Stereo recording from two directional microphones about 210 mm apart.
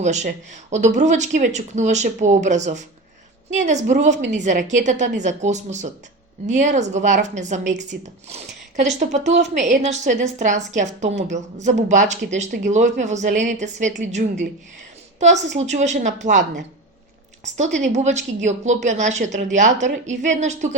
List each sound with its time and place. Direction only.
0.0 s a woman's voice: 35° right (ahead or behind)
17.7 s speech: 35° right (ahead or behind)